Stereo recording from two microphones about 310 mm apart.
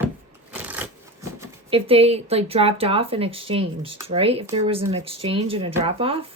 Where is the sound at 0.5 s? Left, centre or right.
Centre.